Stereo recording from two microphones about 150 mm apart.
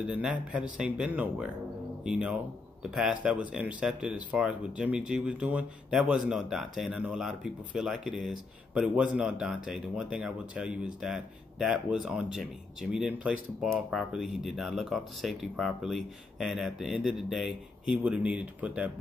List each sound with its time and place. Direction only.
0.0 s a man's voice: 5° right (ahead or behind)